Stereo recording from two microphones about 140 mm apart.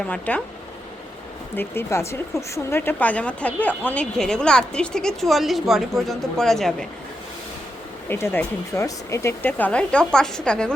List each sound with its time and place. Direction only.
0.1 s speech: 10° left (ahead or behind)
1.5 s a woman's voice: 20° left (ahead or behind); by 6.8 s 5° left (ahead or behind)
8.1 s speech: 15° left (ahead or behind)